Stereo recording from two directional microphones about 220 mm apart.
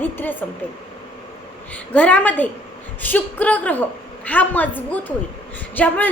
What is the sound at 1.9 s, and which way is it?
A woman's voice, 5° left (ahead or behind).